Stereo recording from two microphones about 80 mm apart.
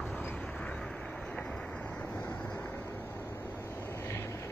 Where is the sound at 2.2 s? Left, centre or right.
Centre.